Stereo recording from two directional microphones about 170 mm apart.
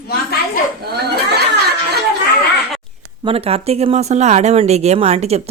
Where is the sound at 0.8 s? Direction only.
70° right (ahead or behind).